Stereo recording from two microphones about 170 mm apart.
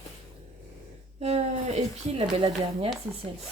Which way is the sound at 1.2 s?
40° right (ahead or behind).